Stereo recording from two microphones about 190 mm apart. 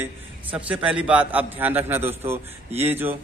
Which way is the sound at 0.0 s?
10° right (ahead or behind).